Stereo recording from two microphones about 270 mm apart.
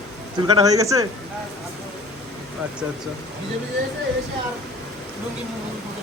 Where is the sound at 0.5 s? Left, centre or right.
Centre.